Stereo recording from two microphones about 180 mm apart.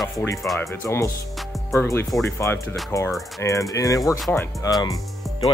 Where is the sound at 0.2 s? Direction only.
15° left (ahead or behind).